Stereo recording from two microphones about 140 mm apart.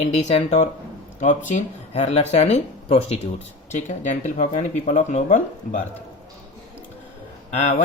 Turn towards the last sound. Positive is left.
turn(degrees=55)  # may be behind; listen again after turning